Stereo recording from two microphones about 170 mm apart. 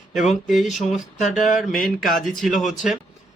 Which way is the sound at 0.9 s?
45° left (ahead or behind).